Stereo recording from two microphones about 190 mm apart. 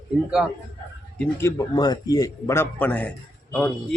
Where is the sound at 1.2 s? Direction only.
15° left (ahead or behind).